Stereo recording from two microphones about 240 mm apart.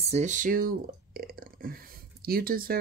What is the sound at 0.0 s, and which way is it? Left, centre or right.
Speech, right.